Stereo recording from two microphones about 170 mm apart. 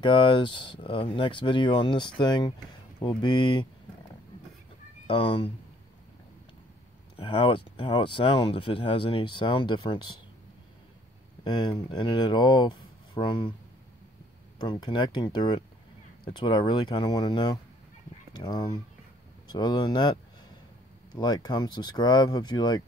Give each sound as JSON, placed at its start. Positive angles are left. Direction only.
{"t": 0.0, "sound": "speech", "side_deg": 30}
{"t": 5.0, "sound": "speech", "side_deg": 30}
{"t": 7.2, "sound": "speech", "side_deg": 30}
{"t": 11.4, "sound": "speech", "side_deg": 25}
{"t": 14.6, "sound": "speech", "side_deg": 25}